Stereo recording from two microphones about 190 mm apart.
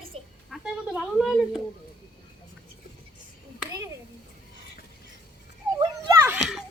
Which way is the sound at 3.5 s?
15° right (ahead or behind).